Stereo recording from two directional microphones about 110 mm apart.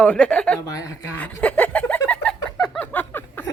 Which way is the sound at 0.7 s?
30° left (ahead or behind).